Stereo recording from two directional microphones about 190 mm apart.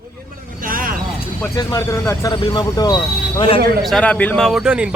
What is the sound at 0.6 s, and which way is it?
Vehicle, 45° right (ahead or behind).